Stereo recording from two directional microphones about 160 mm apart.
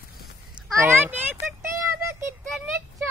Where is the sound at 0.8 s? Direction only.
15° right (ahead or behind).